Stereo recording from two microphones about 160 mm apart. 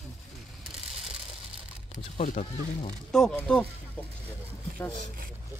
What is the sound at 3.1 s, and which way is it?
Speech, 5° left (ahead or behind).